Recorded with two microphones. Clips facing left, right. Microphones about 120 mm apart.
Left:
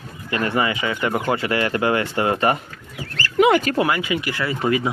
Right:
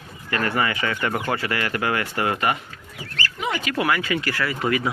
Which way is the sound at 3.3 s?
80° left.